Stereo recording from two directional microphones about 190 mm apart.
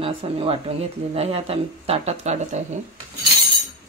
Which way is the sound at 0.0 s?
30° right (ahead or behind).